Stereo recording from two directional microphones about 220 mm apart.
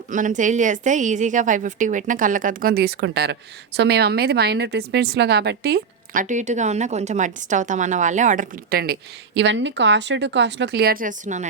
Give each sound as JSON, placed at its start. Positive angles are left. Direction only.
{"t": 0.1, "sound": "a woman's voice", "side_deg": -35}
{"t": 6.2, "sound": "a woman's voice", "side_deg": -35}